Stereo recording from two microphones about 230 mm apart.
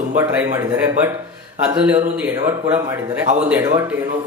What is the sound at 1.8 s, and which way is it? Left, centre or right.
Speech, centre.